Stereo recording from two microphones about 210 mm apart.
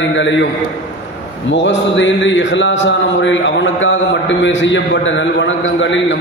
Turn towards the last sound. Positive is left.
turn(degrees=60)  # may be behind; listen again after turning